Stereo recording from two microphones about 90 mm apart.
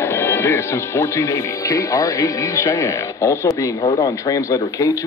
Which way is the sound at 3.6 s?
35° left (ahead or behind).